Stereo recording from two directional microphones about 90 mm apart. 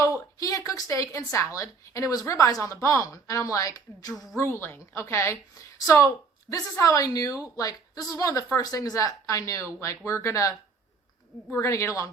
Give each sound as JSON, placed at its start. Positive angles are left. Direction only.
{"t": 0.0, "sound": "a woman's voice", "side_deg": 35}
{"t": 4.4, "sound": "a woman's voice", "side_deg": 25}
{"t": 11.5, "sound": "a woman's voice", "side_deg": 30}